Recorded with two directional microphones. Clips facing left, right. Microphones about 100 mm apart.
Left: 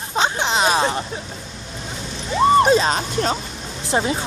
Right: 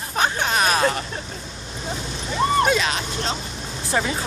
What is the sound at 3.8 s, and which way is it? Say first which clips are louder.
Speech: left 3 dB; 25° left (ahead or behind).